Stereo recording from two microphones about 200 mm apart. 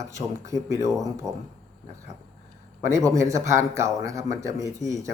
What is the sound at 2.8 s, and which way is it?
A man's voice, 15° right (ahead or behind).